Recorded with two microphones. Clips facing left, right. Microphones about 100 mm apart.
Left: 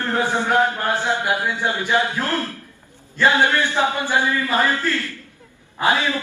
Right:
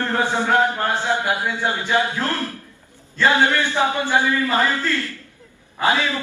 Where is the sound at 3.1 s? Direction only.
20° left (ahead or behind).